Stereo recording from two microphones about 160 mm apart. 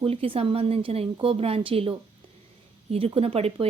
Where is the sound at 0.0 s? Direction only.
35° right (ahead or behind).